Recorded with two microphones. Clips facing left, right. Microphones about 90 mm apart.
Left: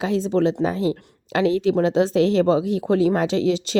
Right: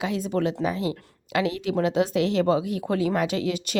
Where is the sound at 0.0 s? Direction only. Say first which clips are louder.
Left 5 dB; 30° left (ahead or behind).